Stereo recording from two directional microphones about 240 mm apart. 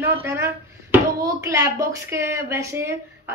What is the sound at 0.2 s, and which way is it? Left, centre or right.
A woman's voice, centre.